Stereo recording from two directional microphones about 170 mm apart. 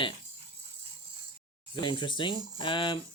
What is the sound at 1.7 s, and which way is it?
Speech, 25° left (ahead or behind).